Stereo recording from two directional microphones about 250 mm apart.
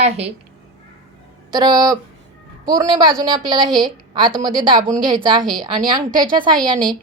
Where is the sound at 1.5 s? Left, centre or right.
Centre.